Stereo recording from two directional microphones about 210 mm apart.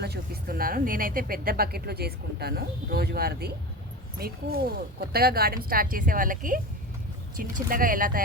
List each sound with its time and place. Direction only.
0.0 s speech: 50° right (ahead or behind)